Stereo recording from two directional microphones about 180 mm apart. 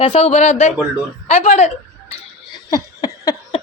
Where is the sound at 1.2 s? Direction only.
35° left (ahead or behind).